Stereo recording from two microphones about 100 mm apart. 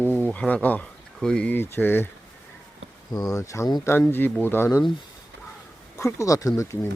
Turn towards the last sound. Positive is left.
turn(degrees=30)  # may be behind; listen again after turning